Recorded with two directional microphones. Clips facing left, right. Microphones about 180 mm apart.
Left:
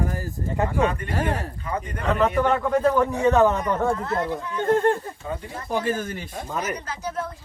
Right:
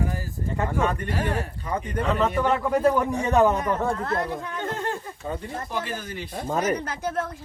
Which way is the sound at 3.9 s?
50° right (ahead or behind).